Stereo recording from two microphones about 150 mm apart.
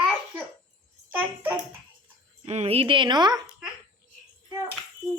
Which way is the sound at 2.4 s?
45° right (ahead or behind).